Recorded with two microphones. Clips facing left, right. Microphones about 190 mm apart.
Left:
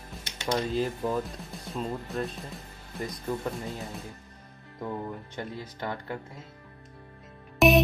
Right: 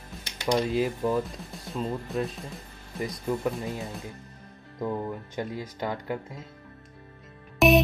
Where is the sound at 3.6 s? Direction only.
15° right (ahead or behind).